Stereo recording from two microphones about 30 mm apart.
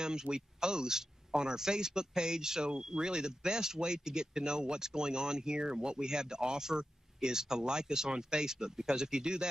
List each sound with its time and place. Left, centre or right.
0.0 s speech: right